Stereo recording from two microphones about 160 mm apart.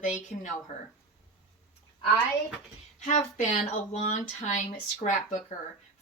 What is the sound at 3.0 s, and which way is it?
Speech, 50° left (ahead or behind).